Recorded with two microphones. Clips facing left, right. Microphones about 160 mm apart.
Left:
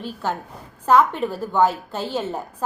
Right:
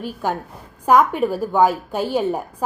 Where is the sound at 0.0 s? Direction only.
10° right (ahead or behind).